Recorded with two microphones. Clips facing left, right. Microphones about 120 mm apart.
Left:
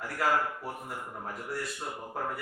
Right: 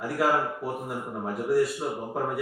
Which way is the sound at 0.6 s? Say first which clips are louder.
Right 7 dB; 5° right (ahead or behind).